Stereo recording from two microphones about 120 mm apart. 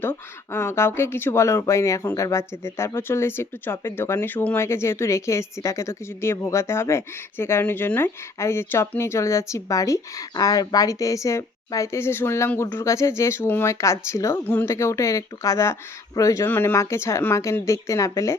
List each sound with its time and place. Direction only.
0.0 s speech: 20° left (ahead or behind)
16.5 s speech: 15° left (ahead or behind)